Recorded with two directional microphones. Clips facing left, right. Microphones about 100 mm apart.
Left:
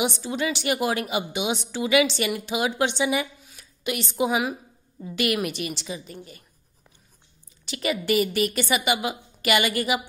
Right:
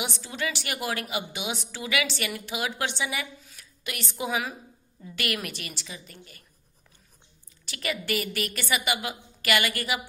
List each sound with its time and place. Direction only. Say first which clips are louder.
0.0 s a woman's voice: left 6 dB; 20° left (ahead or behind)
7.6 s a woman's voice: left 6 dB; 20° left (ahead or behind)